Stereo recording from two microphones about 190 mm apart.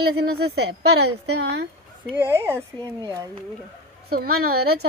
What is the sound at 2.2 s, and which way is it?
Speech, 15° right (ahead or behind).